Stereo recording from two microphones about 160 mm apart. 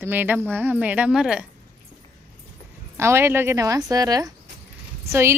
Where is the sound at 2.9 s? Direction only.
15° right (ahead or behind).